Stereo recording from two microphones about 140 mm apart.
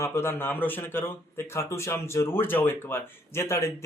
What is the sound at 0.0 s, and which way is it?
Speech, 15° left (ahead or behind).